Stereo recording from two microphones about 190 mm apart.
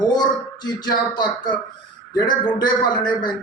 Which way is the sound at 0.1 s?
20° left (ahead or behind).